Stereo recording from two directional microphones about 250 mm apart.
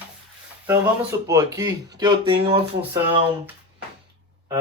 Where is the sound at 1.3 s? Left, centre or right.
Centre.